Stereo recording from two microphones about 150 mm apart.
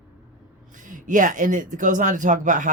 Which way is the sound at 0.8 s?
60° right (ahead or behind).